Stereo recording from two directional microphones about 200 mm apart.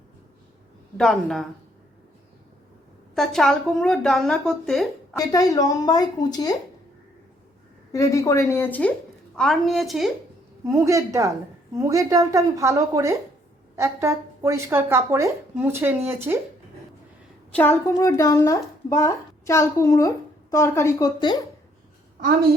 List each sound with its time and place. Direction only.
0.9 s speech: centre (ahead or behind)
3.2 s speech: centre (ahead or behind)
5.1 s speech: 20° left (ahead or behind)
7.9 s a child's voice: 15° left (ahead or behind); by 10.1 s centre (ahead or behind)
10.7 s speech: 15° right (ahead or behind)
17.5 s a woman's voice: 10° left (ahead or behind)